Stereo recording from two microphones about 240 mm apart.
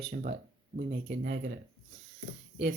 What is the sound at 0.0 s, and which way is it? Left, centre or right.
Speech, right.